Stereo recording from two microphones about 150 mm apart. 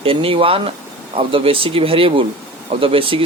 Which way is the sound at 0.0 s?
40° right (ahead or behind).